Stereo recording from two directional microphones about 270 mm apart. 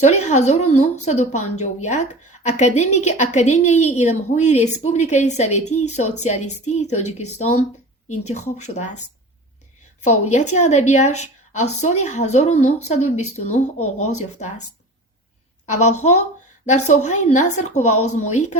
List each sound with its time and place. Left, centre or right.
0.0 s a woman's voice: left
10.0 s a woman's voice: left